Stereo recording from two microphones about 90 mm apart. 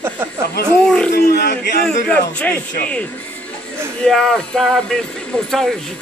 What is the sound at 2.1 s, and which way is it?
Speech, 15° left (ahead or behind).